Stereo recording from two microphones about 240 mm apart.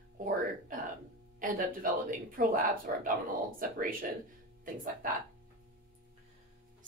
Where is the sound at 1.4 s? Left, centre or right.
Right.